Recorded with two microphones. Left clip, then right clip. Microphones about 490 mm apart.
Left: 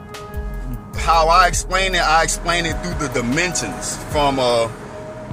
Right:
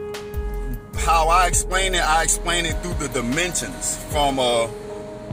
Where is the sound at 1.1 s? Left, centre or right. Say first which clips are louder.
Left 4 dB; right.